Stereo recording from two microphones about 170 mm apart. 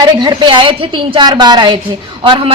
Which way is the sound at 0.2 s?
25° right (ahead or behind).